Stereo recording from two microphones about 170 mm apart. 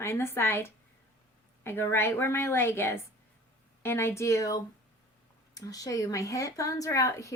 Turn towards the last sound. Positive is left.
turn(degrees=20)  # may be behind; listen again after turning